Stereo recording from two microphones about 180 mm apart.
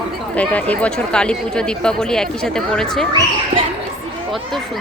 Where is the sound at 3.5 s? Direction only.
35° right (ahead or behind).